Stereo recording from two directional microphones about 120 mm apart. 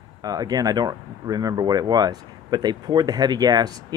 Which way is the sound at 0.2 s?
35° right (ahead or behind).